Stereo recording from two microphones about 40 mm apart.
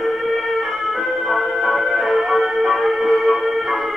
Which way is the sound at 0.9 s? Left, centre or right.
Centre.